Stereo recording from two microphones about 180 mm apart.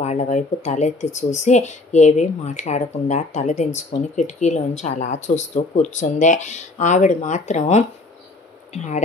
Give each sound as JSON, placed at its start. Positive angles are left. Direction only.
{"t": 0.0, "sound": "speech", "side_deg": 40}